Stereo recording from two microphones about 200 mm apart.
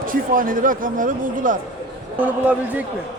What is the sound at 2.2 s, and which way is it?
Speech, 10° right (ahead or behind).